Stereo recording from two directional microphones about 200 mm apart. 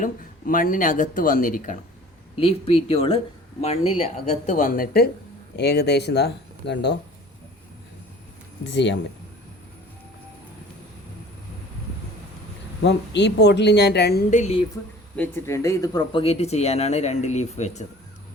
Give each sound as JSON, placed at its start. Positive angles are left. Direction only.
{"t": 0.0, "sound": "speech", "side_deg": 45}
{"t": 2.3, "sound": "speech", "side_deg": 30}
{"t": 8.7, "sound": "speech", "side_deg": 60}
{"t": 12.8, "sound": "speech", "side_deg": 60}
{"t": 14.3, "sound": "speech", "side_deg": 35}
{"t": 15.1, "sound": "speech", "side_deg": 10}